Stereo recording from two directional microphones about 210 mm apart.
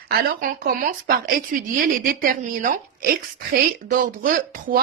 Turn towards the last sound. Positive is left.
turn(degrees=-40)  # may be behind; listen again after turning